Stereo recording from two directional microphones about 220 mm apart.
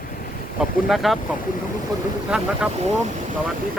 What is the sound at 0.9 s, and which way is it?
Speech, centre (ahead or behind).